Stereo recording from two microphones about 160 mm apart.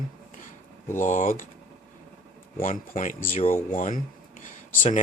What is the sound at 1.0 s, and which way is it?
Speech, 55° left (ahead or behind).